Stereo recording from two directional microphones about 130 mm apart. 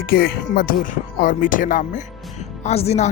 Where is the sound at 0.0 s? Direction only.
90° left.